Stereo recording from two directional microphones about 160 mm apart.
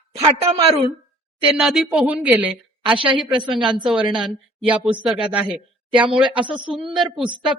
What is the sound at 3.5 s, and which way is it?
Speech, 5° right (ahead or behind).